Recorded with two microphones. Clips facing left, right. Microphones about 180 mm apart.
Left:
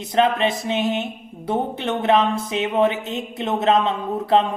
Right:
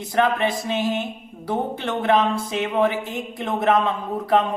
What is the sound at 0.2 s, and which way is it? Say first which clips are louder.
Speech: left 2 dB; 20° left (ahead or behind).